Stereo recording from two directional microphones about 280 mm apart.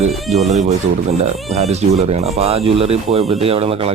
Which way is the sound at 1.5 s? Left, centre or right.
Right.